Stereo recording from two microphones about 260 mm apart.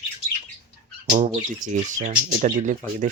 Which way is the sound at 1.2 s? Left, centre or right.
Right.